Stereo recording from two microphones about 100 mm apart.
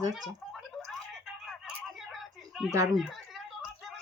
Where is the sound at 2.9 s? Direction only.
Centre (ahead or behind).